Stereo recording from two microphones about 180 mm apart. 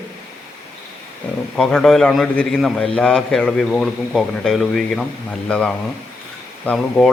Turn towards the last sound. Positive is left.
turn(degrees=5)  # may be behind; listen again after turning